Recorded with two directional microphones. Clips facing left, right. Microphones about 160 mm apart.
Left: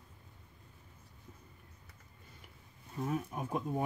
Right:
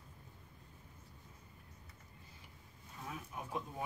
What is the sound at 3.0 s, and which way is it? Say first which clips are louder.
Speech: left 10 dB; 45° left (ahead or behind).